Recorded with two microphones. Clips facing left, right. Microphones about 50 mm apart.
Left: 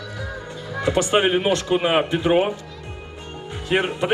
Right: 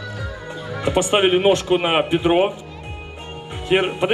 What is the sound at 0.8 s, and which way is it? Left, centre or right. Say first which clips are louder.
Speech: right 1 dB; right.